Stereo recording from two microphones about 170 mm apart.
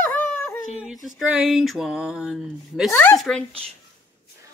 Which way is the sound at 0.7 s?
5° right (ahead or behind).